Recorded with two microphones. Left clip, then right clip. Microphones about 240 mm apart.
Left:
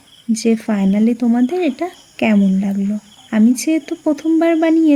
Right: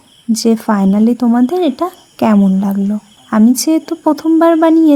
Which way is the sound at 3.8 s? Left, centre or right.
Centre.